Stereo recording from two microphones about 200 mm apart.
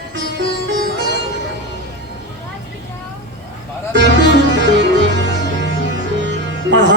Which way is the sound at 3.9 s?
65° right (ahead or behind).